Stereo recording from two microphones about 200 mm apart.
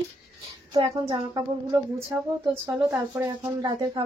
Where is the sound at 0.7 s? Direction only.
25° right (ahead or behind).